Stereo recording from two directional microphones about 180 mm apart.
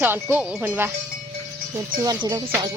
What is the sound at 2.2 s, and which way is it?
Speech, 20° right (ahead or behind).